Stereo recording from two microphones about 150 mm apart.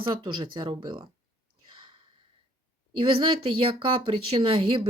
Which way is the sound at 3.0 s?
35° right (ahead or behind).